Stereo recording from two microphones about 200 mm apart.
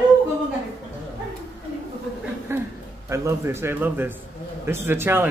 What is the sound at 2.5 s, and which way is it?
Chuckle, 15° right (ahead or behind).